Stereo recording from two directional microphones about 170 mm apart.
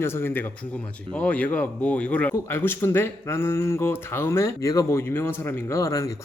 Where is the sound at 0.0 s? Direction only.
15° left (ahead or behind).